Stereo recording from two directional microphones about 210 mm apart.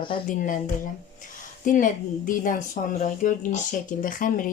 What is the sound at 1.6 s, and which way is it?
Speech, 40° left (ahead or behind).